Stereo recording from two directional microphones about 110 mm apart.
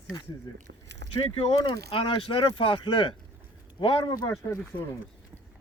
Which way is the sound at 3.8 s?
40° left (ahead or behind).